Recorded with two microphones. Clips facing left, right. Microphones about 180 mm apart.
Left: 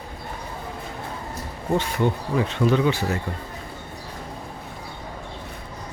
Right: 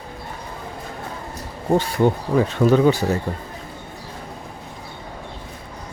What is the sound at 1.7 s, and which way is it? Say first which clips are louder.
Speech: right 5 dB; 40° right (ahead or behind).